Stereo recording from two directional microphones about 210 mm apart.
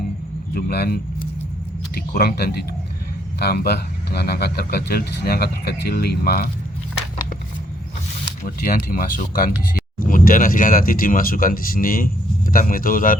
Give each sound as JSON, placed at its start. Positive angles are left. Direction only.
{"t": 0.5, "sound": "speech", "side_deg": 50}
{"t": 8.4, "sound": "speech", "side_deg": 40}